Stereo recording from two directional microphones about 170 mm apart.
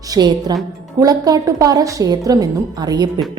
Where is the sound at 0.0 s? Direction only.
25° right (ahead or behind).